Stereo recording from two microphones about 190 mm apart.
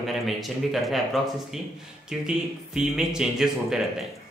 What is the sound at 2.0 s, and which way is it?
Speech, 5° right (ahead or behind).